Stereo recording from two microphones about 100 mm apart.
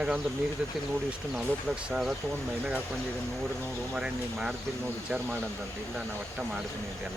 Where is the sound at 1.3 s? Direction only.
5° right (ahead or behind).